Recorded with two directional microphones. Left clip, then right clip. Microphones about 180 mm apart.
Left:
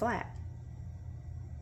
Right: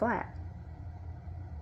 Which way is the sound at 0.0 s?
35° right (ahead or behind).